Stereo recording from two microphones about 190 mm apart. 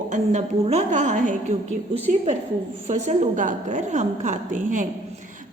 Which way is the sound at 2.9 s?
40° right (ahead or behind).